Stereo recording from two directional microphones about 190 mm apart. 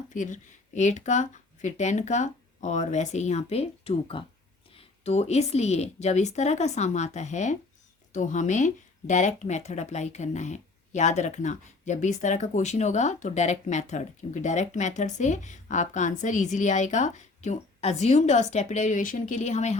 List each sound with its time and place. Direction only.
0.1 s speech: 40° left (ahead or behind)